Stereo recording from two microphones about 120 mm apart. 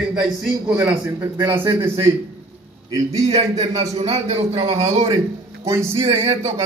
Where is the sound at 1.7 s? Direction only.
25° right (ahead or behind).